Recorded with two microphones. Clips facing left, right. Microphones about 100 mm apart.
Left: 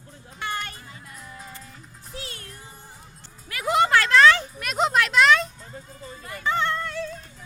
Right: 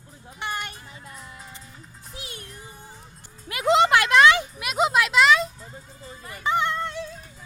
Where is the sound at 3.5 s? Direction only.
20° right (ahead or behind).